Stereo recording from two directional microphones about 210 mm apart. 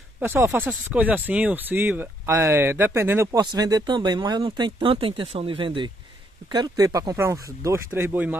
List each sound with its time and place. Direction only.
0.2 s speech: 10° right (ahead or behind)